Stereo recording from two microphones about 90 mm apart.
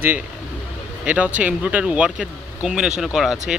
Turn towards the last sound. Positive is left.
turn(degrees=-5)  # may be behind; listen again after turning